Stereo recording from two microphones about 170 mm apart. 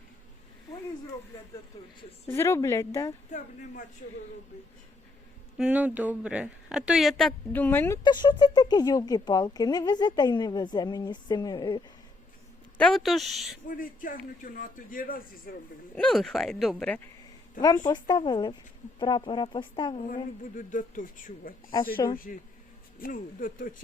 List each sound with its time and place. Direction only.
2.2 s a woman's voice: 15° left (ahead or behind)
5.5 s a woman's voice: 10° right (ahead or behind); by 7.9 s 10° left (ahead or behind)
8.0 s a woman's voice: 25° left (ahead or behind)
12.7 s a woman's voice: 5° left (ahead or behind)
13.7 s a man's voice: 55° left (ahead or behind)
16.0 s a woman's voice: centre (ahead or behind)
17.6 s a man's voice: 55° left (ahead or behind)
18.1 s a woman's voice: 25° left (ahead or behind)
20.0 s a man's voice: 50° left (ahead or behind)